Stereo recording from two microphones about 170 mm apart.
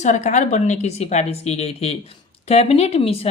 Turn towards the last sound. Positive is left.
turn(degrees=35)  # may be behind; listen again after turning